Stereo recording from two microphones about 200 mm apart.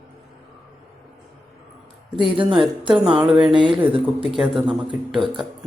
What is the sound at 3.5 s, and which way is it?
Speech, 25° right (ahead or behind).